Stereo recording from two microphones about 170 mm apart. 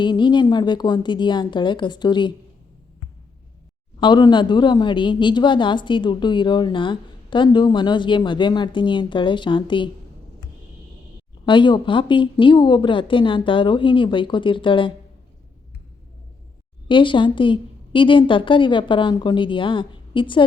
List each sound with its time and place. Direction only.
0.0 s a woman's voice: 25° left (ahead or behind)
4.0 s a woman's voice: 25° left (ahead or behind)
11.4 s a woman's voice: 30° left (ahead or behind)
16.9 s a woman's voice: 30° left (ahead or behind)